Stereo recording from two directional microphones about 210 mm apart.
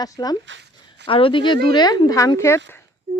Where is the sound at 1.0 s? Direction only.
25° left (ahead or behind).